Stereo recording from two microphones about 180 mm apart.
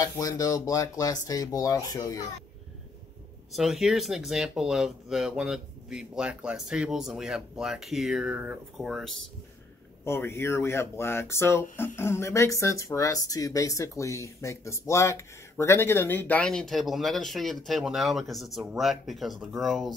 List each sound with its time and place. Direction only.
0.0 s speech: 20° left (ahead or behind)
3.5 s speech: centre (ahead or behind)
10.0 s speech: 15° left (ahead or behind)